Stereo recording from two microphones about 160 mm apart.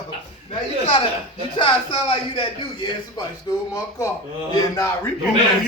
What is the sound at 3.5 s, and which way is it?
A man's voice, 25° left (ahead or behind).